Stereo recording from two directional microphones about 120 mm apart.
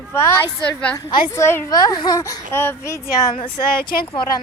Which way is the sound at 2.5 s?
20° left (ahead or behind).